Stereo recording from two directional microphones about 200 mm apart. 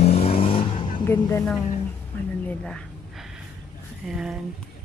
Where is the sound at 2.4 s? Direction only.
5° left (ahead or behind).